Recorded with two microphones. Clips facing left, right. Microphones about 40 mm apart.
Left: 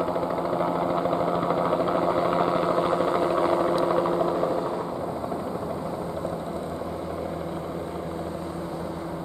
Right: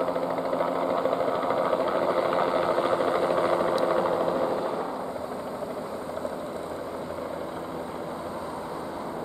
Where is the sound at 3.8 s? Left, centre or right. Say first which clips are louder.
Left 1 dB; centre.